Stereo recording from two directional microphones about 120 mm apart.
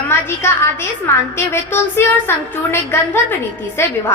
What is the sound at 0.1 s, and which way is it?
A woman's voice, 20° left (ahead or behind).